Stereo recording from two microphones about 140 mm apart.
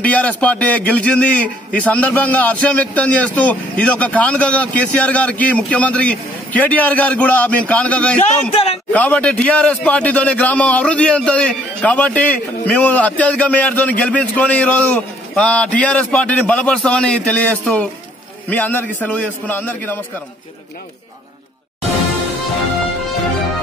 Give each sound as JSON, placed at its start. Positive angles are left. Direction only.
{"t": 0.0, "sound": "a man's voice", "side_deg": 10}
{"t": 8.2, "sound": "speech", "side_deg": 50}
{"t": 8.9, "sound": "a man's voice", "side_deg": 10}